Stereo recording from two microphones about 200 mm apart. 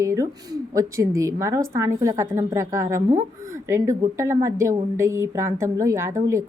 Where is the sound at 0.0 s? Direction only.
15° right (ahead or behind).